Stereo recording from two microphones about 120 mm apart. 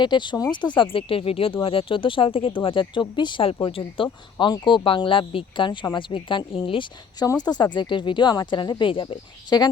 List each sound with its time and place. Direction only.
0.0 s speech: 40° left (ahead or behind)
7.2 s speech: 35° left (ahead or behind)